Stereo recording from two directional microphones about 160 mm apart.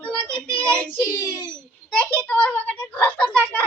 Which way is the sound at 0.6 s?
10° left (ahead or behind).